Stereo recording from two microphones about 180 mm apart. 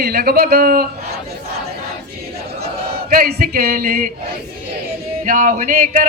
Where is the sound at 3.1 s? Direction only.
55° right (ahead or behind).